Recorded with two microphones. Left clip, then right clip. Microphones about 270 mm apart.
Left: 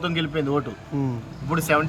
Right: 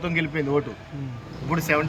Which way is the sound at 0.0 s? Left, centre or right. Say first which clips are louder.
Even; centre.